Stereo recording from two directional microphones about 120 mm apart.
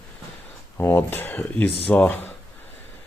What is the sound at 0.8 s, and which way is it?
Speech, 15° left (ahead or behind).